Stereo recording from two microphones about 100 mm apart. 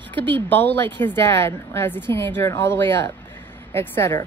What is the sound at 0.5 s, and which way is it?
Speech, 20° left (ahead or behind).